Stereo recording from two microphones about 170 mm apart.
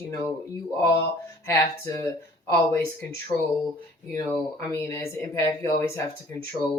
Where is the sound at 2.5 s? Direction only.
15° left (ahead or behind).